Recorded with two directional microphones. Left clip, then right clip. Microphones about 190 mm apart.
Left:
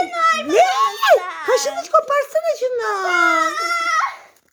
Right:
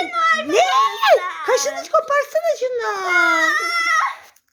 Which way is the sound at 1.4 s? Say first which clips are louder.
Left 1 dB; 10° left (ahead or behind).